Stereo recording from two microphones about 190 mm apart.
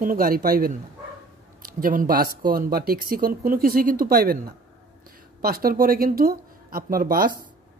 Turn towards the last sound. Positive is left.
turn(degrees=-50)  # may be behind; listen again after turning